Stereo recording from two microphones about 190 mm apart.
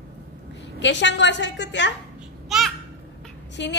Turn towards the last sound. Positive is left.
turn(degrees=65)  # may be behind; listen again after turning